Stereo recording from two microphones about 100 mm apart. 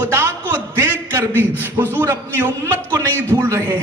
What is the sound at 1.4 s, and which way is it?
A man's voice, 20° right (ahead or behind).